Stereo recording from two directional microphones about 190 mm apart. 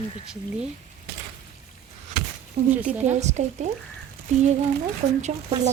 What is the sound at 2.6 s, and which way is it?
Speech, 35° right (ahead or behind).